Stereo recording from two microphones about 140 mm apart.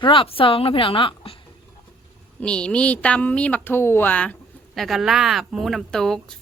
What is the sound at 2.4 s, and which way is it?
Speech, 5° left (ahead or behind).